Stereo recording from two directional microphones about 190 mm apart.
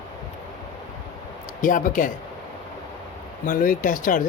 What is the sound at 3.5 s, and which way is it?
Speech, 45° left (ahead or behind).